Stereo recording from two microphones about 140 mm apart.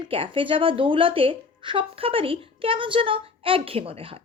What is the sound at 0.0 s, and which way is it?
A woman's voice, 35° right (ahead or behind).